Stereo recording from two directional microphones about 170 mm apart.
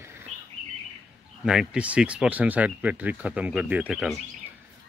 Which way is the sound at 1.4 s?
5° right (ahead or behind).